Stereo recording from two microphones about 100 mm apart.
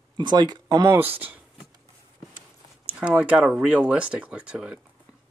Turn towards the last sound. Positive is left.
turn(degrees=-10)  # may be behind; listen again after turning